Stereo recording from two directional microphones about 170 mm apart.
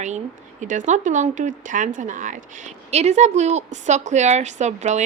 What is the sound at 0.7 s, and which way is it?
Speech, 45° right (ahead or behind).